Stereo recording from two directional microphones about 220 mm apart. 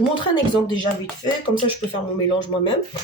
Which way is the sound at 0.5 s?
20° left (ahead or behind).